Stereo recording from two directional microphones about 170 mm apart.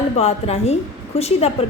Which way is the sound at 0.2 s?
35° left (ahead or behind).